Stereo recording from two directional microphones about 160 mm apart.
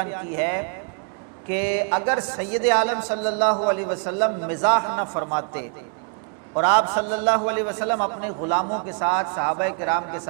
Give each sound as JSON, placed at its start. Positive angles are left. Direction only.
{"t": 0.0, "sound": "a man's voice", "side_deg": -15}